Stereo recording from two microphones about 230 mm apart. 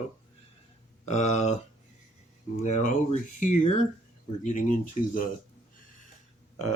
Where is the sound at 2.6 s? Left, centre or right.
Left.